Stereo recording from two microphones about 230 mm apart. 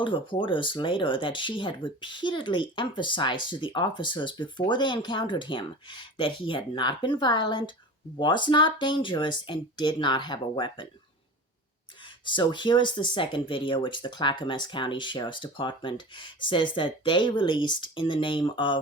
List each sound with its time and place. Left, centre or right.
0.0 s speech: left
12.2 s speech: centre